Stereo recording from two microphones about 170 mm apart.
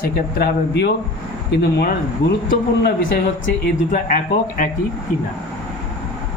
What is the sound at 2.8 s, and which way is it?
Speech, 55° left (ahead or behind).